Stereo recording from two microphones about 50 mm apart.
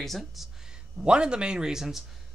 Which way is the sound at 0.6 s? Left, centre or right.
Centre.